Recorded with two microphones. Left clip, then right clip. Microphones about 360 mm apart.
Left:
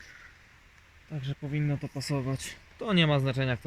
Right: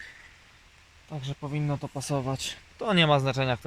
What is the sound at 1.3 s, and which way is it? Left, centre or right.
Speech, right.